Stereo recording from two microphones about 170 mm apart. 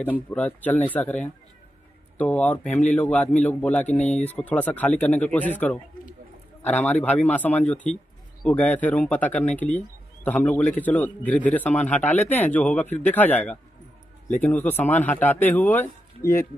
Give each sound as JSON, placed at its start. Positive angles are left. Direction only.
{"t": 0.0, "sound": "speech", "side_deg": 10}
{"t": 14.6, "sound": "speech", "side_deg": 10}